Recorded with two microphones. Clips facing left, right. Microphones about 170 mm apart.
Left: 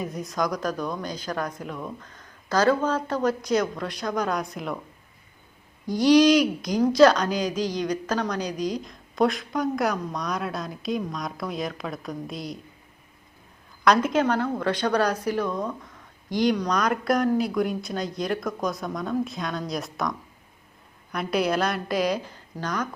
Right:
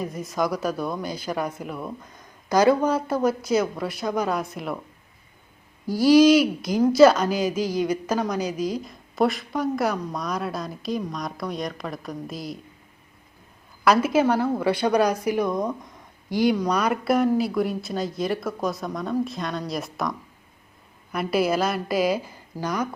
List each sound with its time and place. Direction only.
0.0 s speech: centre (ahead or behind)
5.8 s speech: 5° right (ahead or behind)
13.8 s speech: 5° right (ahead or behind)